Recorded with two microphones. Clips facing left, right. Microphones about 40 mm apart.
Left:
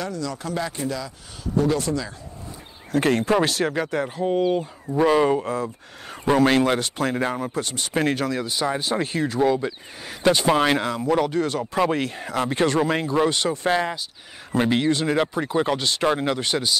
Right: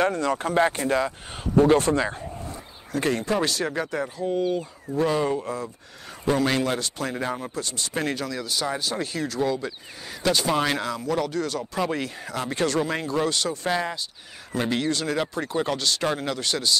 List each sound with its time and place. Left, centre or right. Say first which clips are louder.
0.0 s speech: right 6 dB; right
3.0 s speech: left 4 dB; left
4.2 s speech: left 4 dB; left